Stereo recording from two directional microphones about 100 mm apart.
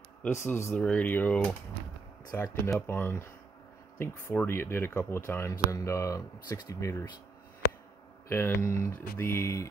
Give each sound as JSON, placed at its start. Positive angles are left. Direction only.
{"t": 0.3, "sound": "speech", "side_deg": 25}
{"t": 0.7, "sound": "speech", "side_deg": 10}
{"t": 4.5, "sound": "speech", "side_deg": 25}
{"t": 8.3, "sound": "speech", "side_deg": 25}